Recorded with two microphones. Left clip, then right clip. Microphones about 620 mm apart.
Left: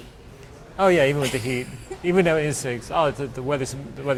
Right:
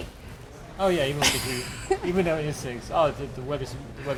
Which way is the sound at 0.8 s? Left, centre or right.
Left.